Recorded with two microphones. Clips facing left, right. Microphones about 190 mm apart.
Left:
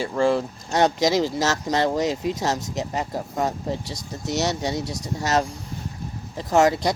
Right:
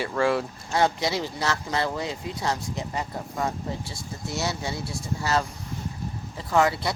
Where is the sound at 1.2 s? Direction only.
40° left (ahead or behind).